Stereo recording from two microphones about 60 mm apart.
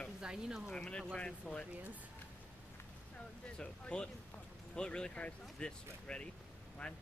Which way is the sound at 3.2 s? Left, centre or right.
Centre.